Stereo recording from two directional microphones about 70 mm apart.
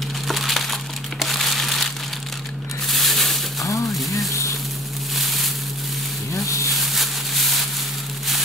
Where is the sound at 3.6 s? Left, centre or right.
Left.